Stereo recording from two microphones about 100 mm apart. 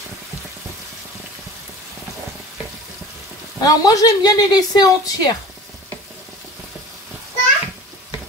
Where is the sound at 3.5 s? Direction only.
40° left (ahead or behind).